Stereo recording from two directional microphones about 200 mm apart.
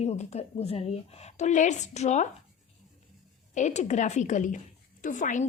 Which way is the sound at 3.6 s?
35° left (ahead or behind).